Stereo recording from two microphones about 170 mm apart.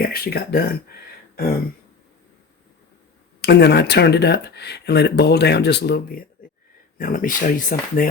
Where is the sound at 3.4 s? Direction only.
75° left (ahead or behind).